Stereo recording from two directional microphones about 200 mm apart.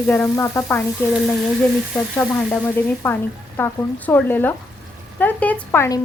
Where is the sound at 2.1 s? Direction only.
10° left (ahead or behind).